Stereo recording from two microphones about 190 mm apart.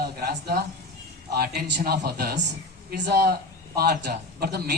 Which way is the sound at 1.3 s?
55° right (ahead or behind).